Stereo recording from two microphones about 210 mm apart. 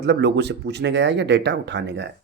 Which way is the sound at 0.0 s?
55° right (ahead or behind).